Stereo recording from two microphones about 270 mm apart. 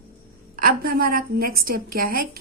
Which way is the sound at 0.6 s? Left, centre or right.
Right.